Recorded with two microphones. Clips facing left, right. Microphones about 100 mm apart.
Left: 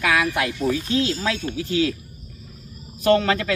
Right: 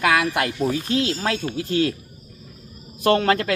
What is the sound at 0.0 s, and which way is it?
Speech, 60° right (ahead or behind).